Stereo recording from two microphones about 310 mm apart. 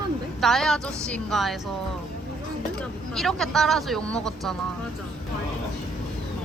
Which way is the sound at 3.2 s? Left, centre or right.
Centre.